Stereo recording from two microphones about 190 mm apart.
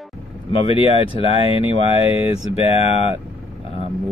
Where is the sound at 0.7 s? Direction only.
30° left (ahead or behind).